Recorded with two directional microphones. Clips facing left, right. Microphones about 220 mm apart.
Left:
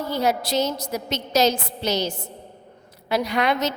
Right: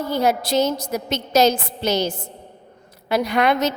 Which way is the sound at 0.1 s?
50° right (ahead or behind).